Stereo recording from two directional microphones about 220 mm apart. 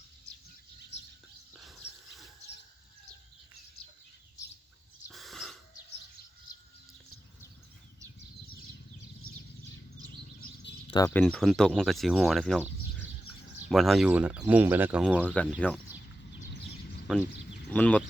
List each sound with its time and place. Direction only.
5.0 s snort: centre (ahead or behind)
10.4 s bird: 50° left (ahead or behind)
10.8 s a sound: 20° left (ahead or behind)
11.1 s speech: 5° left (ahead or behind)
15.2 s speech: 5° left (ahead or behind)
17.1 s speech: 5° left (ahead or behind)